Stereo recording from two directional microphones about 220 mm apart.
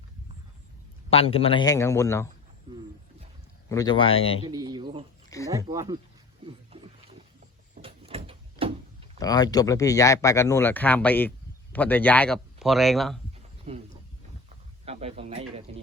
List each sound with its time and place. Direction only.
1.1 s speech: 25° left (ahead or behind)
2.7 s wild animals: 20° right (ahead or behind)
3.7 s speech: 15° left (ahead or behind)
4.4 s speech: 20° right (ahead or behind)
6.4 s pig: 25° right (ahead or behind)
7.8 s door: 25° right (ahead or behind)
9.1 s speech: 15° left (ahead or behind); by 13.1 s centre (ahead or behind)
13.7 s speech: 25° right (ahead or behind)
14.8 s a sound: 25° right (ahead or behind)